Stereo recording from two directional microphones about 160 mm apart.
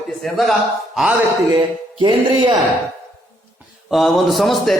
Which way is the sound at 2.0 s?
30° right (ahead or behind).